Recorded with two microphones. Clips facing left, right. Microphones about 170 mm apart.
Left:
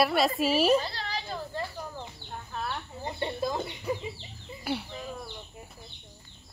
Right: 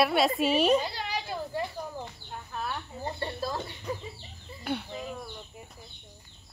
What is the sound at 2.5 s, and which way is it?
Chicken, centre (ahead or behind).